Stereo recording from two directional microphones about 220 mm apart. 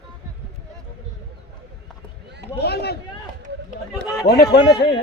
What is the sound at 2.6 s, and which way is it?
Speech, 45° left (ahead or behind).